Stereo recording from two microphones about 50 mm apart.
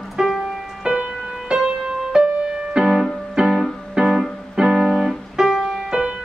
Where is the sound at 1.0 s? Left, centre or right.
Centre.